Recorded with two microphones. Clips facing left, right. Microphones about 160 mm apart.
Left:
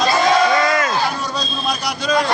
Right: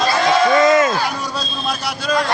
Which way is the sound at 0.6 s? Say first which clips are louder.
Right 6 dB; 25° right (ahead or behind).